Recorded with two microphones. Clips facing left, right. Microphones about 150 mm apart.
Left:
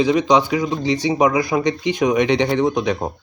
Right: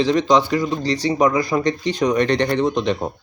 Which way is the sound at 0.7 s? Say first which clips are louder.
Left 1 dB; 20° left (ahead or behind).